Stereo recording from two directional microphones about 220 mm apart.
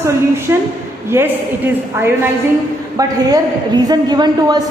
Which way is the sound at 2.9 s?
15° right (ahead or behind).